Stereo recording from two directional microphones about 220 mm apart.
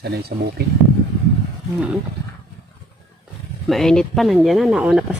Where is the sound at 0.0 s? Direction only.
45° right (ahead or behind).